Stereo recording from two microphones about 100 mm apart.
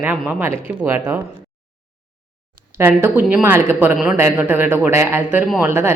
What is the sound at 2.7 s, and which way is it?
Speech, 25° right (ahead or behind).